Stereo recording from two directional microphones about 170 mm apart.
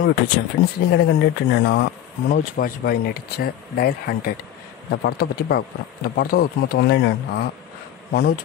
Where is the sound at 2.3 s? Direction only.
55° left (ahead or behind); by 7.4 s 80° left.